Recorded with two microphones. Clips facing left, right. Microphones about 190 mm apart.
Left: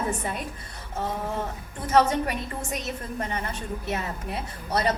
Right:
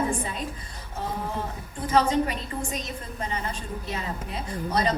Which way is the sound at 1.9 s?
65° left (ahead or behind).